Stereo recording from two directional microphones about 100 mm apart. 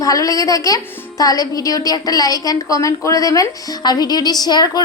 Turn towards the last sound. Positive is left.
turn(degrees=40)  # may be behind; listen again after turning